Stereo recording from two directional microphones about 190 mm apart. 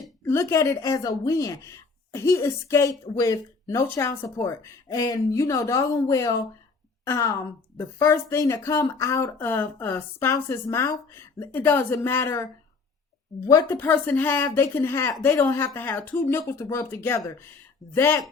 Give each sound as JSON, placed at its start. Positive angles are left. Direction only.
{"t": 0.3, "sound": "a woman's voice", "side_deg": 15}